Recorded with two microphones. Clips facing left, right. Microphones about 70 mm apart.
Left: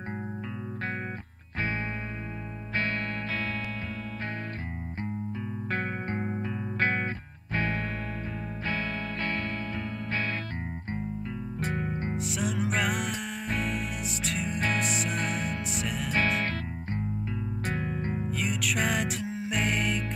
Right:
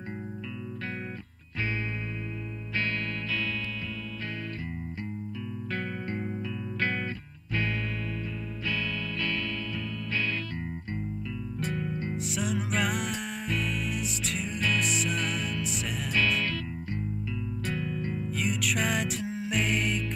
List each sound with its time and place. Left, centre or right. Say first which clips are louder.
2.7 s music: left 1 dB; left
5.7 s music: left 2 dB; left
8.6 s music: even; left
12.3 s music: left 1 dB; centre
15.1 s music: left 1 dB; left
18.4 s music: right 1 dB; centre